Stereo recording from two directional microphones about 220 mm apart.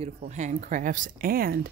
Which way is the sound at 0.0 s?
30° right (ahead or behind).